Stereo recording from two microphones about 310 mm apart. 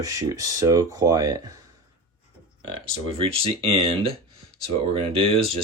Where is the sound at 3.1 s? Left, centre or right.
Centre.